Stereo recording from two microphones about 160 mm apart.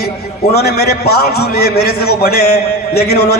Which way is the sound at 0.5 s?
80° left.